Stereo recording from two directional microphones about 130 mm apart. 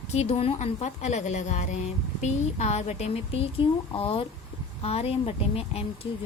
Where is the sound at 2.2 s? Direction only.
55° left (ahead or behind).